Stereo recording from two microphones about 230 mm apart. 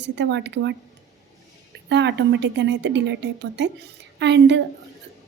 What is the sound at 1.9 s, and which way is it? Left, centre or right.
Speech, right.